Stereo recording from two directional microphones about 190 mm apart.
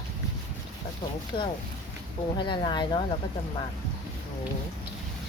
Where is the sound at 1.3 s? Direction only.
25° left (ahead or behind).